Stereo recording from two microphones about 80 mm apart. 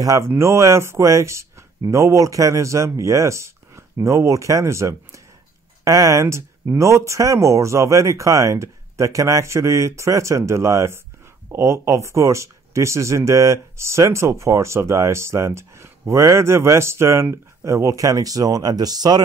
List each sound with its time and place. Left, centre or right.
0.0 s speech: right